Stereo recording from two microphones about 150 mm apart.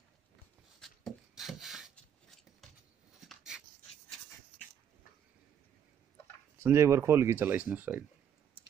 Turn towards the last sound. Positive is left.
turn(degrees=-10)  # may be behind; listen again after turning